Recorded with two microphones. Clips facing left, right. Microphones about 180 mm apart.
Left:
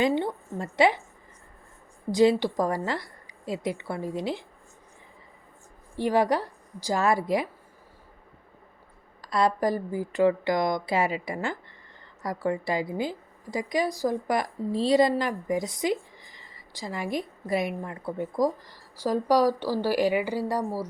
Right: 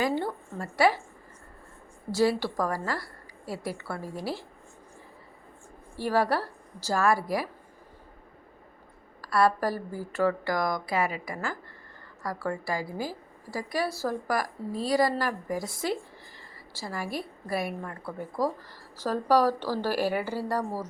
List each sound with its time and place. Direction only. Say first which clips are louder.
0.0 s a woman's voice: left 3 dB; 20° left (ahead or behind)
2.1 s a woman's voice: left 4 dB; 20° left (ahead or behind)
6.0 s a woman's voice: left 3 dB; 15° left (ahead or behind)
9.2 s a woman's voice: even; 20° left (ahead or behind)